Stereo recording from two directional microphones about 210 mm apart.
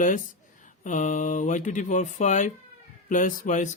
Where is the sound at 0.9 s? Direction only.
35° left (ahead or behind).